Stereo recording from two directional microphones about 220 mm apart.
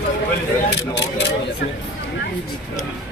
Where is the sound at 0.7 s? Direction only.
50° left (ahead or behind).